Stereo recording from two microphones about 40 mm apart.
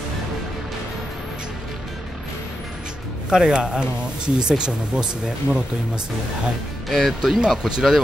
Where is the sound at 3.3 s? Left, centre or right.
Centre.